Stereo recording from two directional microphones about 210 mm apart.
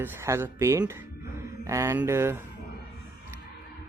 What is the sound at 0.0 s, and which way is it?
Speech, 10° right (ahead or behind).